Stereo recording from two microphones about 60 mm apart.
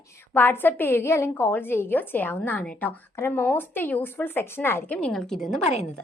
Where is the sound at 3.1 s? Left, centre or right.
Left.